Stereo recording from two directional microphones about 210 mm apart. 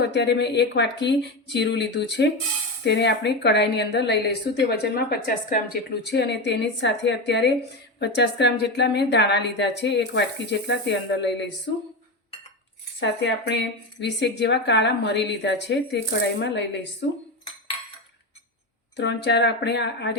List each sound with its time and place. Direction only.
0.0 s a woman's voice: 55° left (ahead or behind)
13.0 s speech: 55° left (ahead or behind)
18.9 s speech: 55° left (ahead or behind)